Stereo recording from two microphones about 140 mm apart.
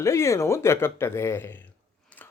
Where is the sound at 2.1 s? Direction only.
10° left (ahead or behind).